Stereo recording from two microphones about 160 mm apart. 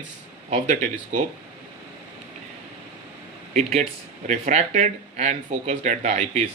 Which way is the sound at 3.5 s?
50° right (ahead or behind).